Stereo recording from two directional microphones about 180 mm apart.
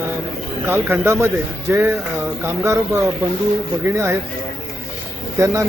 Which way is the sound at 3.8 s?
15° right (ahead or behind).